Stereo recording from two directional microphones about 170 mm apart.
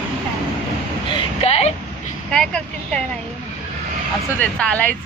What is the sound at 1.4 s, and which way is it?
Vehicle, 40° left (ahead or behind).